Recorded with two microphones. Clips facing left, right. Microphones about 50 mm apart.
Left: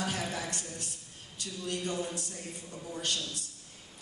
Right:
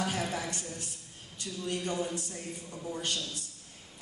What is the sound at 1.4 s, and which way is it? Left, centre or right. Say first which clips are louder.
A man's voice: right 1 dB; right.